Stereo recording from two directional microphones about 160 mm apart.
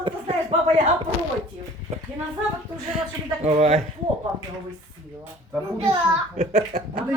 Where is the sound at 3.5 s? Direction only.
40° right (ahead or behind).